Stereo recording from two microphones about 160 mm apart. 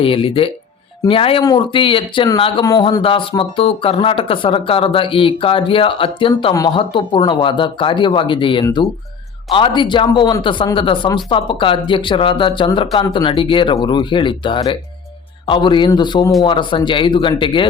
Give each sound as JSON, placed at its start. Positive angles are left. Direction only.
{"t": 0.0, "sound": "speech", "side_deg": 35}
{"t": 6.5, "sound": "a man's voice", "side_deg": 20}